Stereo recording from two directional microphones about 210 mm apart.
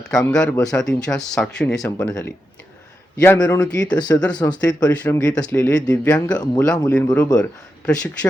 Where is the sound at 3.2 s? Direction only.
10° left (ahead or behind).